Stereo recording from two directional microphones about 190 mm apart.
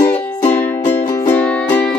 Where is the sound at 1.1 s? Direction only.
20° left (ahead or behind).